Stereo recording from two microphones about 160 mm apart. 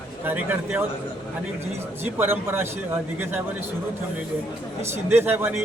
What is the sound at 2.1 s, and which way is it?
Speech, 15° right (ahead or behind).